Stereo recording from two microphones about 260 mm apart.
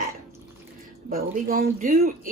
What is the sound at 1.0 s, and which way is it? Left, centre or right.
Speech, right.